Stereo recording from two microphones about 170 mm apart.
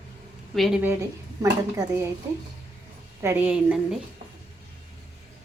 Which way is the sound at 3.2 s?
15° right (ahead or behind).